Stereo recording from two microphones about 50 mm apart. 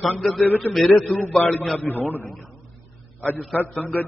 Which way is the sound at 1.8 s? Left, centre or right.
Left.